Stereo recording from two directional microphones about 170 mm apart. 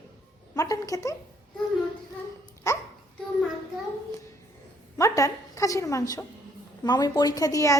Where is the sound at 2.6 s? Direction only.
15° left (ahead or behind).